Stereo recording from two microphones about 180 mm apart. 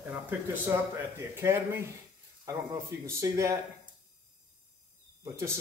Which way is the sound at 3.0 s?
15° right (ahead or behind).